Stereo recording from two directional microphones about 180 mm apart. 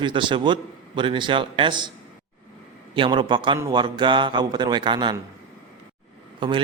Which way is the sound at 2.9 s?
25° right (ahead or behind).